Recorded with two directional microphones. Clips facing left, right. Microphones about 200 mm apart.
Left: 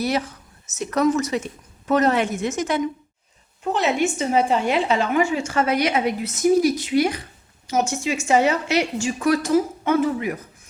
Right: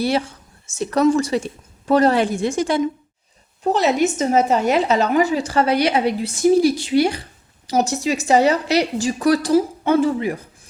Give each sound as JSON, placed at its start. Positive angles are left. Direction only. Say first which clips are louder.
{"t": 0.0, "sound": "a woman's voice", "louder": "right 3 dB", "side_deg": -30}